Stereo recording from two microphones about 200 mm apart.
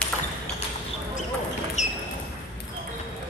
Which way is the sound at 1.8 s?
35° left (ahead or behind).